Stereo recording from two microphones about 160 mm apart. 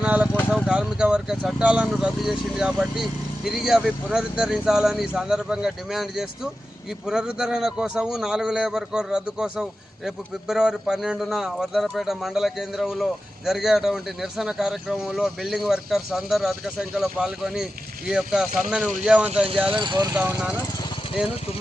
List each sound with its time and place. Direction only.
0.0 s vehicle: 5° right (ahead or behind)
0.5 s a man's voice: 5° right (ahead or behind)
19.7 s speech: 30° right (ahead or behind)
20.1 s speech: 10° right (ahead or behind)